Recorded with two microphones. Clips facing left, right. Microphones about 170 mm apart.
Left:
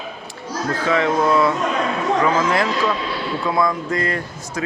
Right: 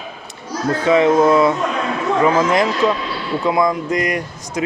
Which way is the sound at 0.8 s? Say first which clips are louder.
Right 6 dB; 20° right (ahead or behind).